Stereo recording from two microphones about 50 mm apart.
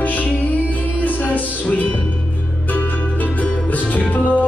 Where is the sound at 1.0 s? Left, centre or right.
Left.